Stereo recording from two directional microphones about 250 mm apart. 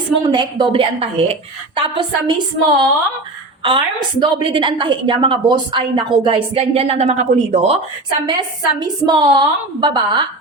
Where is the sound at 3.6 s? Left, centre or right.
Centre.